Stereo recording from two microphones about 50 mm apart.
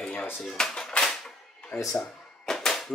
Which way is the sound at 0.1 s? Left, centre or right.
Centre.